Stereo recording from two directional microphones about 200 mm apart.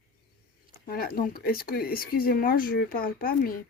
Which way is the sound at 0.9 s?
45° left (ahead or behind).